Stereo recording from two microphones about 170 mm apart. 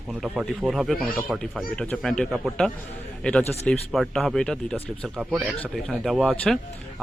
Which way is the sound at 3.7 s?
Centre (ahead or behind).